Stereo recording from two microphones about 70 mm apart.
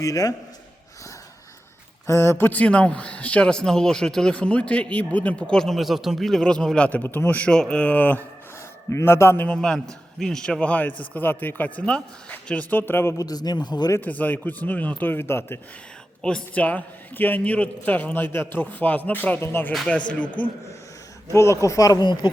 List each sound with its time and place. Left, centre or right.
0.0 s speech: left
2.0 s a man's voice: left
2.5 s a man's voice: centre
6.7 s a man's voice: left
7.5 s a man's voice: centre
8.9 s a man's voice: left
9.6 s a man's voice: centre; by 13.1 s left
13.1 s a man's voice: left
14.0 s a man's voice: left
16.2 s a man's voice: centre
19.4 s a man's voice: left
20.1 s a man's voice: centre
21.3 s speech: left